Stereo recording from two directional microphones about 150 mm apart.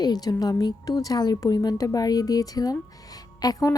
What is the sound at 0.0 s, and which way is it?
A woman's voice, 25° left (ahead or behind).